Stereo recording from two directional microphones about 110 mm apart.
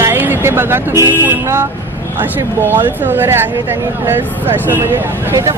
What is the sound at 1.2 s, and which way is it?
Speech, 20° right (ahead or behind).